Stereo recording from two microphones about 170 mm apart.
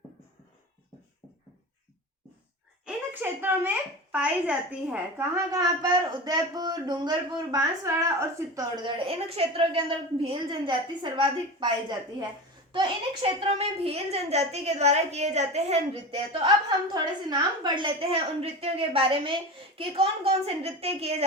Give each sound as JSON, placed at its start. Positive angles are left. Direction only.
{"t": 2.8, "sound": "a woman's voice", "side_deg": -10}
{"t": 12.7, "sound": "a woman's voice", "side_deg": -30}